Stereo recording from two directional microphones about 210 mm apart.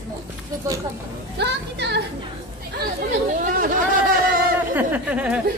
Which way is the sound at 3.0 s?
45° right (ahead or behind).